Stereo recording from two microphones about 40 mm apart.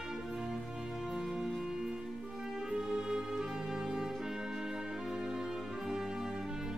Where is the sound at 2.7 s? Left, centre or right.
Right.